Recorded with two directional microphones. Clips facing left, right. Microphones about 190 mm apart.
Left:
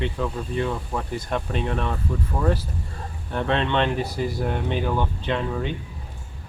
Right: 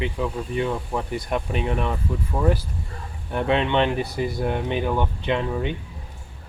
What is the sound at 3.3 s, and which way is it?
Speech, 10° right (ahead or behind).